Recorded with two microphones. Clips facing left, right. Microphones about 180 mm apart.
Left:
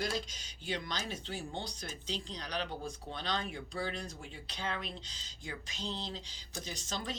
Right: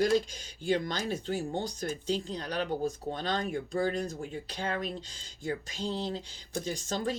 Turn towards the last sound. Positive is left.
turn(degrees=-50)  # may be behind; listen again after turning